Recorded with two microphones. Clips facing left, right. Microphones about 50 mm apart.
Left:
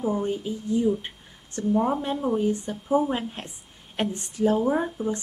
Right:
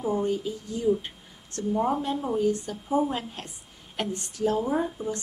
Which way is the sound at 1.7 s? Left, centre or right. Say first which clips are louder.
Left 2 dB; centre.